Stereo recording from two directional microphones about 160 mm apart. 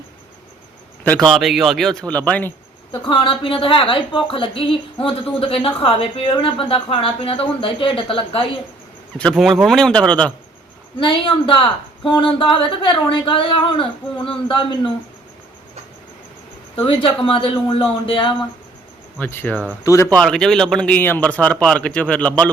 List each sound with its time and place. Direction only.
1.0 s speech: 5° left (ahead or behind)
2.9 s a woman's voice: 30° left (ahead or behind)
9.3 s speech: centre (ahead or behind)
11.0 s a woman's voice: 35° left (ahead or behind)
16.8 s a woman's voice: 35° left (ahead or behind)
19.2 s a man's voice: 10° left (ahead or behind)
20.1 s a man's voice: 5° left (ahead or behind)